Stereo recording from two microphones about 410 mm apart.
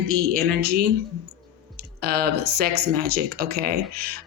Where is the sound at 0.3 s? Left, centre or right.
Right.